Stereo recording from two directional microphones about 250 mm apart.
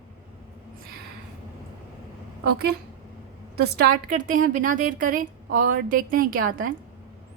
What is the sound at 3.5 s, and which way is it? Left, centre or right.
A woman's voice, right.